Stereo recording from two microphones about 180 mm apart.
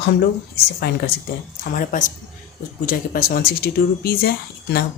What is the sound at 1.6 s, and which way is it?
Speech, 50° left (ahead or behind).